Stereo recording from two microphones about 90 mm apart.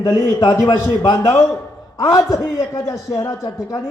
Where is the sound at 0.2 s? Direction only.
40° left (ahead or behind).